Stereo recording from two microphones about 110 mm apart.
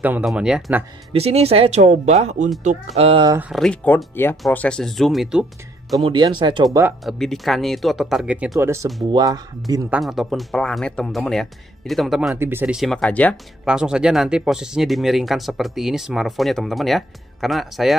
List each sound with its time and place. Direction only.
0.2 s speech: 5° right (ahead or behind)
1.1 s speech: 65° right (ahead or behind); by 2.3 s 90° right
2.9 s speech: 65° right (ahead or behind)
3.5 s speech: 5° right (ahead or behind)
3.8 s speech: 20° left (ahead or behind); by 6.0 s 5° right (ahead or behind)
6.0 s speech: 45° right (ahead or behind)
7.1 s speech: centre (ahead or behind)
8.5 s speech: 25° right (ahead or behind)
9.1 s speech: 35° right (ahead or behind)
9.8 s speech: 5° right (ahead or behind)
12.4 s speech: 20° right (ahead or behind)
12.9 s speech: 10° left (ahead or behind)
13.7 s speech: 5° right (ahead or behind)